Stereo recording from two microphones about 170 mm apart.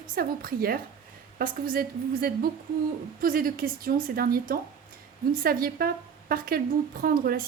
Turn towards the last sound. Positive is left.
turn(degrees=-60)  # may be behind; listen again after turning